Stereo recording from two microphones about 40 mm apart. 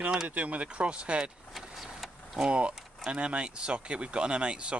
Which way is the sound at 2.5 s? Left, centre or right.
Right.